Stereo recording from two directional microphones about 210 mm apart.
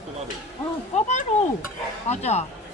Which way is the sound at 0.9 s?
35° left (ahead or behind).